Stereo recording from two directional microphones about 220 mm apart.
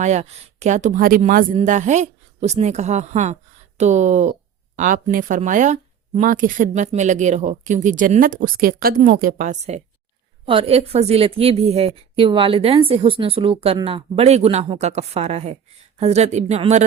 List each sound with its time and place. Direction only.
0.0 s a woman's voice: 30° right (ahead or behind)